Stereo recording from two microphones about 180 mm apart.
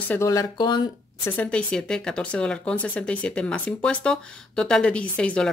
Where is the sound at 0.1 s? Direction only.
15° left (ahead or behind).